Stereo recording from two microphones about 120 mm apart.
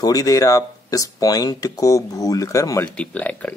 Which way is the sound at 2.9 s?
10° left (ahead or behind).